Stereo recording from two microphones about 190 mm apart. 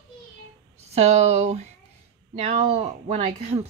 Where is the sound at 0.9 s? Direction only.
35° right (ahead or behind).